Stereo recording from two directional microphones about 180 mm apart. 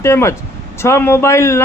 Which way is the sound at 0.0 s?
15° left (ahead or behind).